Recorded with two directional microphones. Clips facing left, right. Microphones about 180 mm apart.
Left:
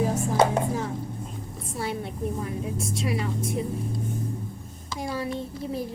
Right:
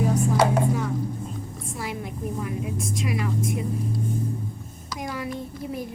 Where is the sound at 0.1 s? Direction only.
25° left (ahead or behind).